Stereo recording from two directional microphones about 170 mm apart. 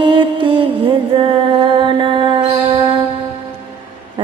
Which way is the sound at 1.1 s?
30° right (ahead or behind).